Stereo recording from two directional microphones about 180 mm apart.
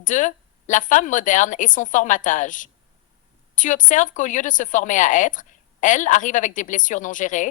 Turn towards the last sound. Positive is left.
turn(degrees=45)  # may be behind; listen again after turning